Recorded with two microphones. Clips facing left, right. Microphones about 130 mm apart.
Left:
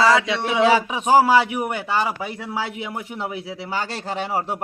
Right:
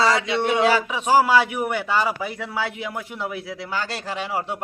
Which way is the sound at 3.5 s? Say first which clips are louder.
Left 1 dB; 30° left (ahead or behind).